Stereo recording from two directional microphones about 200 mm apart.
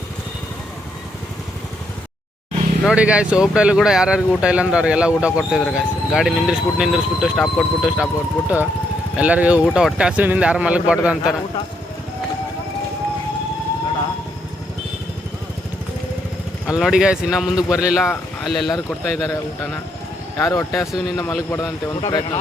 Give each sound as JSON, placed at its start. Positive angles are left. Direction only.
{"t": 2.8, "sound": "speech", "side_deg": -5}
{"t": 16.8, "sound": "speech", "side_deg": -5}
{"t": 19.2, "sound": "speech", "side_deg": 15}